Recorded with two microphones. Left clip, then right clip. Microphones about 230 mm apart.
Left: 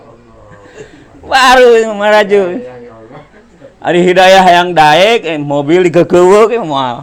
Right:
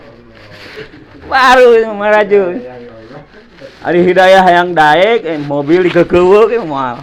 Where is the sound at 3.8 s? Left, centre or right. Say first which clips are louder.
Left 1 dB; left.